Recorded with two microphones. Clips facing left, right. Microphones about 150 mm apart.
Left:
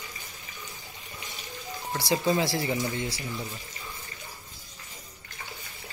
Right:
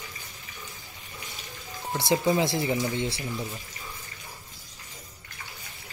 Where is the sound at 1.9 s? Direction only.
20° right (ahead or behind).